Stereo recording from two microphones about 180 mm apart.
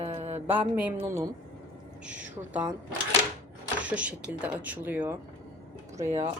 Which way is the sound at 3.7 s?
10° right (ahead or behind).